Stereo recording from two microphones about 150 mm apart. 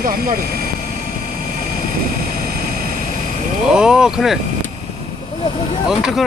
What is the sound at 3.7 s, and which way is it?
Speech, 5° right (ahead or behind).